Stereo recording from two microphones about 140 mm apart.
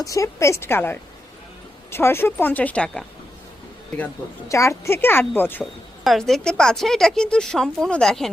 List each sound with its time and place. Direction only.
0.0 s a woman's voice: 20° left (ahead or behind)
4.4 s a woman's voice: 20° left (ahead or behind)
6.1 s speech: centre (ahead or behind)